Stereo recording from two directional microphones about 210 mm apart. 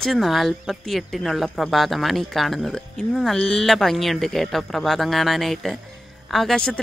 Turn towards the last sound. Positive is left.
turn(degrees=0)  # may be behind; listen again after turning